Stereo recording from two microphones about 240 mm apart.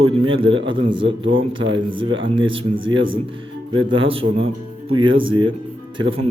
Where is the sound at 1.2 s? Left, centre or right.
Right.